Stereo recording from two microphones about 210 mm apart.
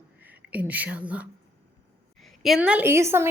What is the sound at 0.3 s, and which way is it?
A woman's voice, 10° right (ahead or behind).